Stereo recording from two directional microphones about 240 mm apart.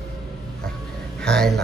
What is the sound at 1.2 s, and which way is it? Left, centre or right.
Speech, centre.